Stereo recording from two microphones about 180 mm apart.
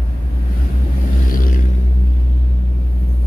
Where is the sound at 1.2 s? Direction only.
50° left (ahead or behind).